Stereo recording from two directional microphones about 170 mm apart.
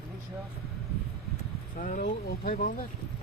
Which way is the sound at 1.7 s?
50° left (ahead or behind).